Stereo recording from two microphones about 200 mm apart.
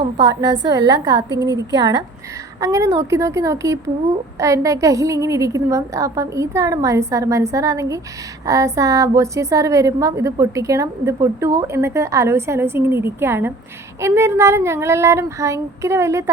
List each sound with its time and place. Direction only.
0.0 s a woman's voice: 20° right (ahead or behind)